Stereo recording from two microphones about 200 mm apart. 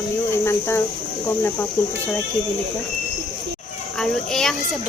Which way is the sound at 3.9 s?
Centre (ahead or behind).